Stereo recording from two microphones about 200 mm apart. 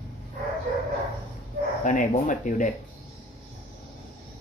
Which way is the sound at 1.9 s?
40° left (ahead or behind).